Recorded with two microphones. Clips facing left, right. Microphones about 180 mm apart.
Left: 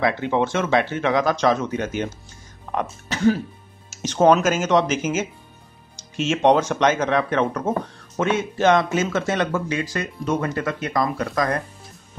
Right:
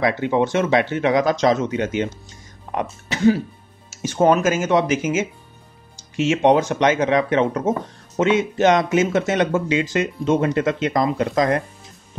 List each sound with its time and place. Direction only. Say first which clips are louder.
0.0 s speech: right 2 dB; 15° right (ahead or behind)
2.7 s speech: right 1 dB; 15° right (ahead or behind)